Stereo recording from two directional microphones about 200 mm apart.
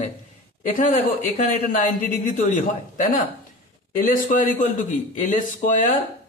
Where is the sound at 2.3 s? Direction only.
40° left (ahead or behind).